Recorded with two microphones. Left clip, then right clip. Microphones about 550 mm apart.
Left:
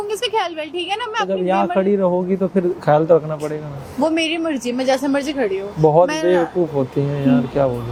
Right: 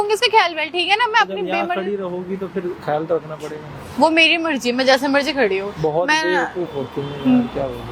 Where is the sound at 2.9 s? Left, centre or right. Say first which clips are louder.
Left 7 dB; left.